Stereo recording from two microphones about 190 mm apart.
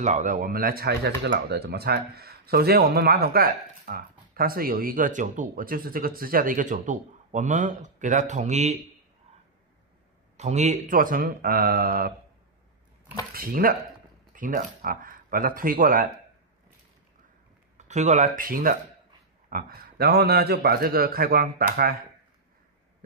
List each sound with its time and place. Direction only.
0.0 s speech: 40° right (ahead or behind)
10.3 s speech: 35° right (ahead or behind)
13.3 s speech: 50° right (ahead or behind)
17.7 s speech: 40° right (ahead or behind)